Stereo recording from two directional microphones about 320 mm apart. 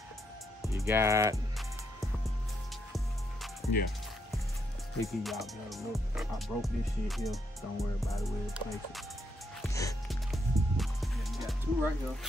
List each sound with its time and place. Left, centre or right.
0.6 s speech: centre
3.6 s speech: centre
5.0 s speech: centre
9.6 s music: centre